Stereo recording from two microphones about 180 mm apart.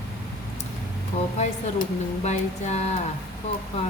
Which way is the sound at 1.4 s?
40° left (ahead or behind).